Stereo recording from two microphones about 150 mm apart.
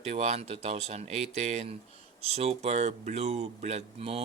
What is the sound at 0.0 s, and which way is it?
Speech, 45° right (ahead or behind).